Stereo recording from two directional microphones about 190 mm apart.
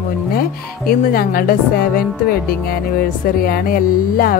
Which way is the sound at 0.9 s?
50° left (ahead or behind).